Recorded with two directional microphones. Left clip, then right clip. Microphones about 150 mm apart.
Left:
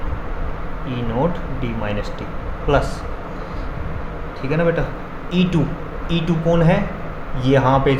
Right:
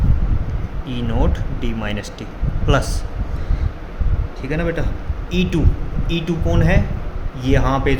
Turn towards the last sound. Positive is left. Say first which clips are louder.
# left 3 dB
turn(degrees=-40)  # may be behind; listen again after turning